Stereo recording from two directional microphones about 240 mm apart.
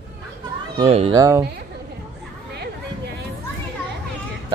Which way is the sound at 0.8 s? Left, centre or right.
Right.